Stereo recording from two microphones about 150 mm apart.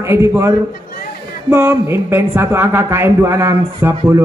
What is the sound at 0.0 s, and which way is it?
A man's voice, 20° right (ahead or behind).